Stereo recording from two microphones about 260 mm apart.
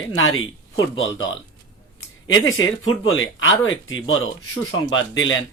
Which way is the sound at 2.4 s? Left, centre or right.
Left.